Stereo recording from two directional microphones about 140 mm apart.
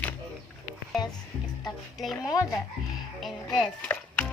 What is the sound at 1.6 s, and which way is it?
Music, centre (ahead or behind).